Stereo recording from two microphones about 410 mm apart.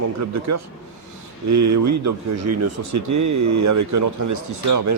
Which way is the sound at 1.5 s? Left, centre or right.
Right.